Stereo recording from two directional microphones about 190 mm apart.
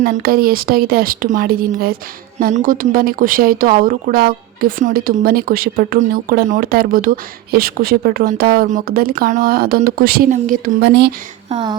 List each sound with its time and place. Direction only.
0.0 s a woman's voice: 50° right (ahead or behind)
10.8 s speech: 60° right (ahead or behind)